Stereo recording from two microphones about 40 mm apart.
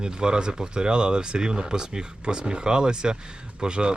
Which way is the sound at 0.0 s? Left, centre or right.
Right.